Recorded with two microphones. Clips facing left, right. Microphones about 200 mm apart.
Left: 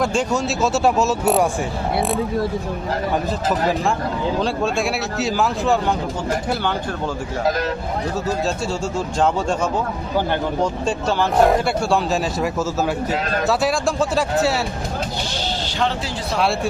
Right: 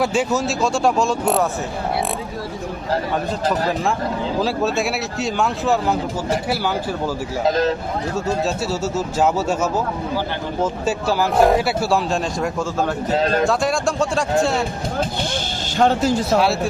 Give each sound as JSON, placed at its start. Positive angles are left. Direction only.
{"t": 0.0, "sound": "speech", "side_deg": -5}
{"t": 4.4, "sound": "speech", "side_deg": -5}
{"t": 7.4, "sound": "speech", "side_deg": -25}
{"t": 9.0, "sound": "speech", "side_deg": -5}
{"t": 10.6, "sound": "speech", "side_deg": -5}
{"t": 15.8, "sound": "speech", "side_deg": -45}